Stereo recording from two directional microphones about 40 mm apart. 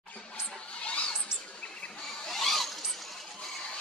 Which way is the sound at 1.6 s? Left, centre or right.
Left.